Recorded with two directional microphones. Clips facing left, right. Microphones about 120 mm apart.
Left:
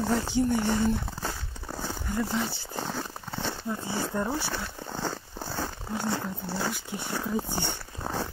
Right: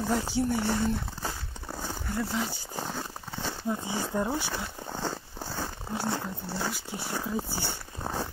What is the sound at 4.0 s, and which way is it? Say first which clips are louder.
Speech: left 3 dB; 10° right (ahead or behind).